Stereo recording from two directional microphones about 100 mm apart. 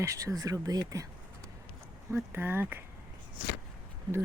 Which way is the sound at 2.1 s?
20° right (ahead or behind).